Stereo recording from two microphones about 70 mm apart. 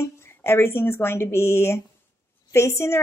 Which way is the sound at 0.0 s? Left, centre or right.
Left.